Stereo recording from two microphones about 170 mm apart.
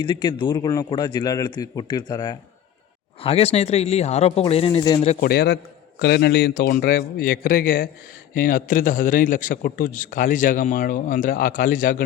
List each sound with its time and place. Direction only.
0.0 s speech: 25° left (ahead or behind)
3.2 s speech: 35° left (ahead or behind)
4.8 s speech: 25° left (ahead or behind)
5.2 s a man's voice: 65° left (ahead or behind); by 12.0 s 50° left (ahead or behind)